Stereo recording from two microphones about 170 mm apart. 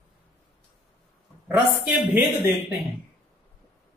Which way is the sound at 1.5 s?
10° right (ahead or behind).